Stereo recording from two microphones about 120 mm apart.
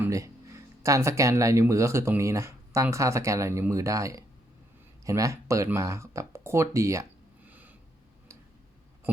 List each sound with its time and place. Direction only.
0.1 s speech: 25° right (ahead or behind)